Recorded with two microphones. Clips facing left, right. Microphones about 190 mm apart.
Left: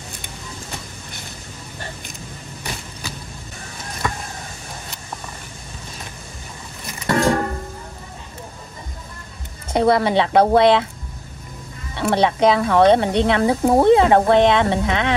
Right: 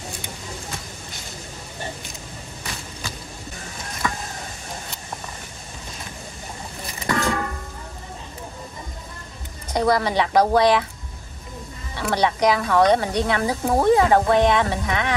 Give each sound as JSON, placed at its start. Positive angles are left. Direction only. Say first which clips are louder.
{"t": 7.1, "sound": "music", "louder": "left 5 dB", "side_deg": 35}
{"t": 9.7, "sound": "speech", "louder": "left 4 dB", "side_deg": 25}
{"t": 11.9, "sound": "speech", "louder": "left 4 dB", "side_deg": 25}